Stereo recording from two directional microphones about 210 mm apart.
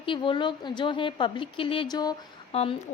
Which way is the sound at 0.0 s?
25° left (ahead or behind).